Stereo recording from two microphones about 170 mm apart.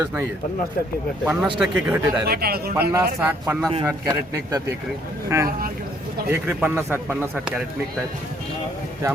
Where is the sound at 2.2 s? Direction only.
65° right (ahead or behind).